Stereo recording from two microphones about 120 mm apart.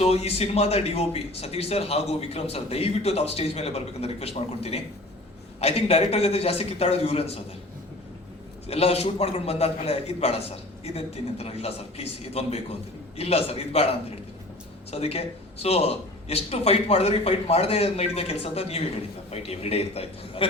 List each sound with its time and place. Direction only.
0.0 s a man's voice: 60° left (ahead or behind)
8.6 s a man's voice: 60° left (ahead or behind)